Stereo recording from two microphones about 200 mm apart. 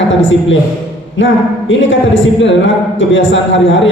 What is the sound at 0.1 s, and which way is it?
A woman's voice, 70° left (ahead or behind).